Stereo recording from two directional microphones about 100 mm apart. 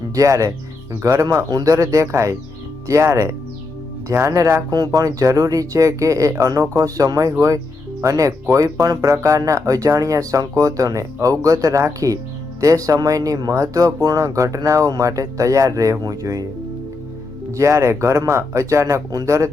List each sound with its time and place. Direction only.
0.1 s speech: 35° right (ahead or behind)
4.7 s speech: 40° right (ahead or behind)
17.5 s speech: 30° right (ahead or behind)